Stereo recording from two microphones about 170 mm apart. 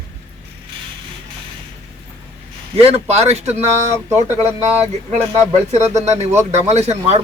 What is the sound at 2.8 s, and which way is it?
Speech, 35° right (ahead or behind).